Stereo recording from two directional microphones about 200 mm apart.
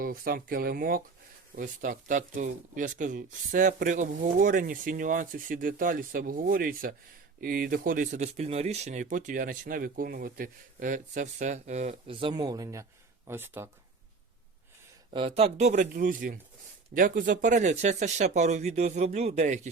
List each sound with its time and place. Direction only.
0.0 s speech: 45° right (ahead or behind); by 13.7 s 10° right (ahead or behind)
15.1 s speech: 30° right (ahead or behind)